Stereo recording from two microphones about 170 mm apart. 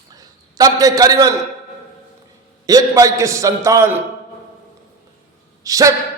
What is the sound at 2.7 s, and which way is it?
A man's voice, 20° right (ahead or behind).